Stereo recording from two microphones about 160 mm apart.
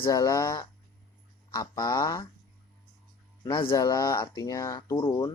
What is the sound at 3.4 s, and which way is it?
Speech, 25° left (ahead or behind).